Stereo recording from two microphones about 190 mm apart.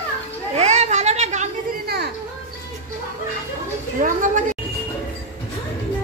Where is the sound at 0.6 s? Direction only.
35° right (ahead or behind).